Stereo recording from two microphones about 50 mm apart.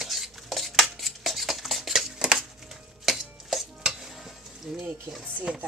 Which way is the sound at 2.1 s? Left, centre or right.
Centre.